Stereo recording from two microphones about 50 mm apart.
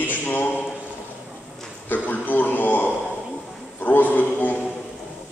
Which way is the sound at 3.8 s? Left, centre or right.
Left.